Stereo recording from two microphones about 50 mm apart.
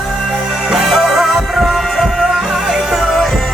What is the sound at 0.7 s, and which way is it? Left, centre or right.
Music, centre.